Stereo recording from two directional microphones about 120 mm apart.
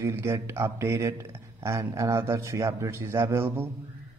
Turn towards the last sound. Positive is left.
turn(degrees=-20)  # may be behind; listen again after turning